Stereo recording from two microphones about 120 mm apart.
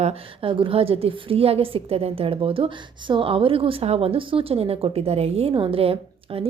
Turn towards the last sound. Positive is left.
turn(degrees=-50)  # may be behind; listen again after turning